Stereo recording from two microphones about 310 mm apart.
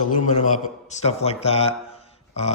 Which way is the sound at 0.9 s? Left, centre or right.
Centre.